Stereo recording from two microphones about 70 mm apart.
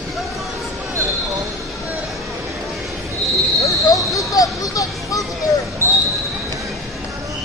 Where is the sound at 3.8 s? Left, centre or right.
Left.